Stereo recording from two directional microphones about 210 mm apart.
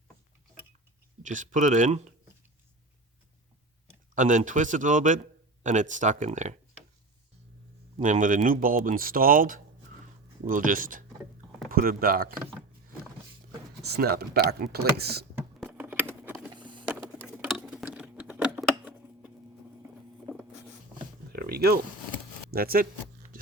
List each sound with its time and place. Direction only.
1.2 s speech: 35° right (ahead or behind)
4.1 s speech: 35° right (ahead or behind)
7.9 s speech: 35° right (ahead or behind)
13.8 s speech: 50° right (ahead or behind)
15.6 s a sound: 5° right (ahead or behind)
16.5 s vehicle: 20° right (ahead or behind)
17.2 s patter: 5° right (ahead or behind)
21.3 s a sound: 45° right (ahead or behind)
22.5 s speech: 45° right (ahead or behind)